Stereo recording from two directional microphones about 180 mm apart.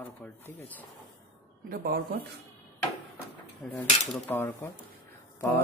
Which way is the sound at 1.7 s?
55° right (ahead or behind).